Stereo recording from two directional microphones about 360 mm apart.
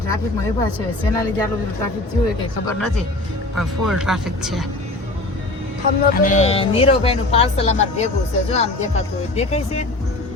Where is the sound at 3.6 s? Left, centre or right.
Centre.